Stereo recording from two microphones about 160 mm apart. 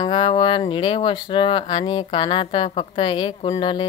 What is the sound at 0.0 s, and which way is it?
Speech, 30° left (ahead or behind).